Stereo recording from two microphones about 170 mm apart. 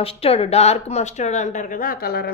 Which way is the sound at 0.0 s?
35° left (ahead or behind).